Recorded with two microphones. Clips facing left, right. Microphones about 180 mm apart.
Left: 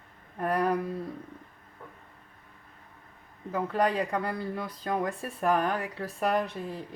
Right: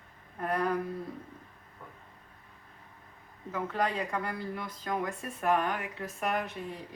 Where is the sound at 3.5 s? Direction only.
30° left (ahead or behind).